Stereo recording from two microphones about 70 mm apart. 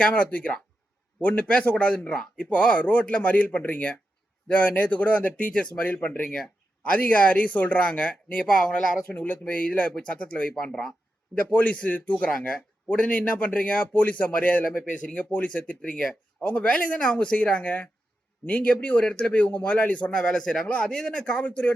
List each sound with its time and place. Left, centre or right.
0.0 s a man's voice: centre
10.5 s speech: centre
11.3 s a man's voice: centre